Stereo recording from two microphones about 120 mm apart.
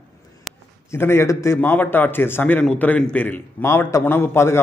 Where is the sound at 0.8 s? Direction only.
20° left (ahead or behind).